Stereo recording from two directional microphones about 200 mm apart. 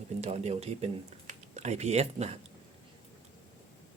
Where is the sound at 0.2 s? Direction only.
30° right (ahead or behind).